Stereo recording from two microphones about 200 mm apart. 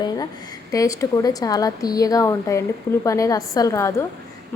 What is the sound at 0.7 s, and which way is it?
A woman's voice, 15° left (ahead or behind).